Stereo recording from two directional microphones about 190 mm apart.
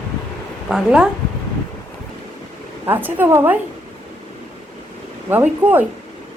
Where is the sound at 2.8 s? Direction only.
10° right (ahead or behind).